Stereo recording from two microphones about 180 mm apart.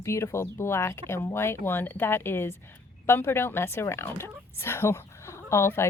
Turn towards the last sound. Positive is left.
turn(degrees=15)  # may be behind; listen again after turning